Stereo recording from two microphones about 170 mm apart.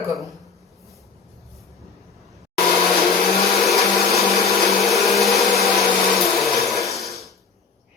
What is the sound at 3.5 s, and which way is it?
Vacuum cleaner, centre (ahead or behind).